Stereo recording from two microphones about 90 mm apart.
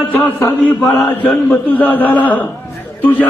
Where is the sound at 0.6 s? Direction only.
Centre (ahead or behind).